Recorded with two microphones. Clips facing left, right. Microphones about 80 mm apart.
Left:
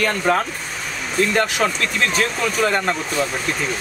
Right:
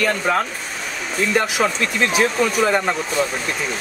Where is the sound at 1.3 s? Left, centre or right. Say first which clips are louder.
Even; centre.